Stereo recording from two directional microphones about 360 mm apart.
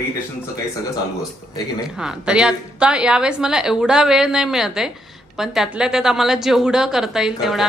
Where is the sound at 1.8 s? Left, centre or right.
Centre.